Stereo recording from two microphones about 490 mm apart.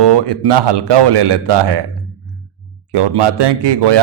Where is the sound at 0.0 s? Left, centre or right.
Right.